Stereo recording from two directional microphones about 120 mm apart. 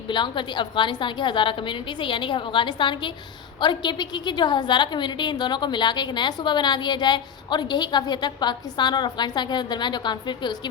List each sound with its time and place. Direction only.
0.1 s a woman's voice: 40° left (ahead or behind)